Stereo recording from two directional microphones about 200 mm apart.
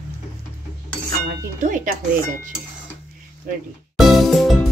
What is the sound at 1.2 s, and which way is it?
Speech, 40° right (ahead or behind).